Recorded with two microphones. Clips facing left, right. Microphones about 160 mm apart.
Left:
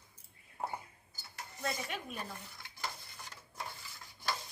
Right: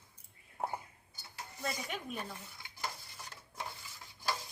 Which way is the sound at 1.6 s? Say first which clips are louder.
Left 1 dB; centre (ahead or behind).